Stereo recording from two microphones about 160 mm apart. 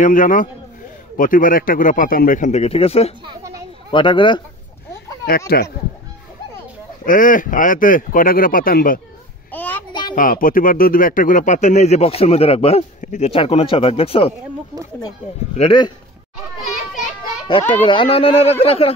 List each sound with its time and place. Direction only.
0.0 s speech: 55° left (ahead or behind); by 4.4 s 30° left (ahead or behind)
5.5 s speech: 80° left
7.1 s speech: 55° left (ahead or behind)
9.5 s a sound: 10° left (ahead or behind)
10.1 s speech: 60° left (ahead or behind); by 14.3 s 35° left (ahead or behind)
15.5 s speech: 40° left (ahead or behind)
17.2 s children playing: 30° left (ahead or behind)
17.8 s speech: 35° left (ahead or behind)